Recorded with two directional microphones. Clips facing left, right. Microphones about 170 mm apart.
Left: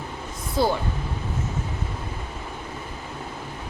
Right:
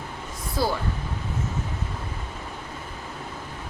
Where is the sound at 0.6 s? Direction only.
20° left (ahead or behind).